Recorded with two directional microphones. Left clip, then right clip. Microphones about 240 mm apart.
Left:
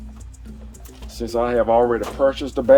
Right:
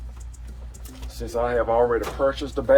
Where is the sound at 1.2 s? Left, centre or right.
Left.